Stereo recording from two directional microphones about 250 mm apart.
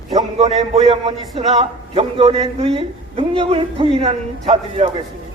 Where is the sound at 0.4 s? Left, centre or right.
Centre.